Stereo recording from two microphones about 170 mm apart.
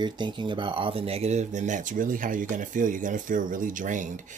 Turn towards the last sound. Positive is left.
turn(degrees=-50)  # may be behind; listen again after turning